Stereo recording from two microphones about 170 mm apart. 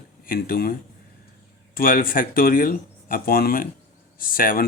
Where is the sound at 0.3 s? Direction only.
60° left (ahead or behind).